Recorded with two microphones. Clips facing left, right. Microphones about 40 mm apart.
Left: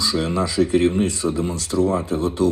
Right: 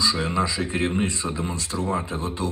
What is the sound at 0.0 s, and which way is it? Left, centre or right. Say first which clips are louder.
Speech: left 2 dB; right.